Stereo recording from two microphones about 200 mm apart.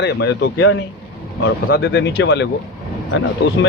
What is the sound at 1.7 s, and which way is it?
Speech, 55° left (ahead or behind).